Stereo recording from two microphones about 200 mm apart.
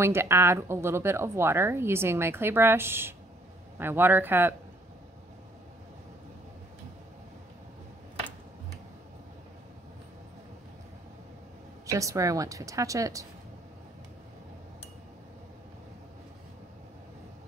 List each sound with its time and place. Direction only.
0.0 s speech: 10° right (ahead or behind)
11.8 s speech: 15° right (ahead or behind)